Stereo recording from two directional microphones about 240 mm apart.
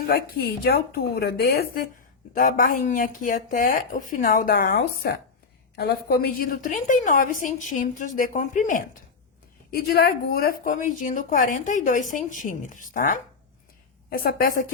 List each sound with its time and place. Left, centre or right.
0.0 s a woman's voice: left